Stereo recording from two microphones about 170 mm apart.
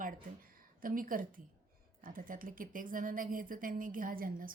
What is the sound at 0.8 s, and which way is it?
Speech, 55° right (ahead or behind).